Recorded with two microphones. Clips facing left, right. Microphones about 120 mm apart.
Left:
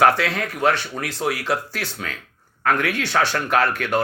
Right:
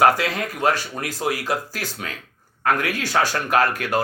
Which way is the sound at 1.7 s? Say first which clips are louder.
Left 1 dB; 40° right (ahead or behind).